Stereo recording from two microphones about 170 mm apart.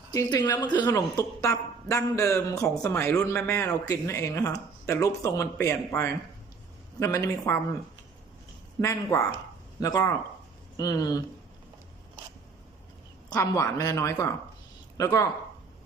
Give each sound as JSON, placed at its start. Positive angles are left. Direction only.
{"t": 0.1, "sound": "a woman's voice", "side_deg": 20}
{"t": 8.8, "sound": "speech", "side_deg": 20}
{"t": 13.3, "sound": "a woman's voice", "side_deg": 20}